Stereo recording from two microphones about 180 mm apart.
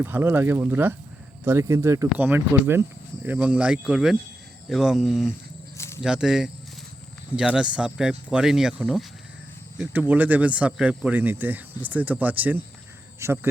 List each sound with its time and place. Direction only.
0.0 s speech: 10° right (ahead or behind)
5.7 s a sound: 15° left (ahead or behind)
6.0 s speech: 5° right (ahead or behind)